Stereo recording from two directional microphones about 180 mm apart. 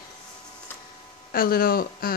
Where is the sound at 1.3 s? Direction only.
55° left (ahead or behind).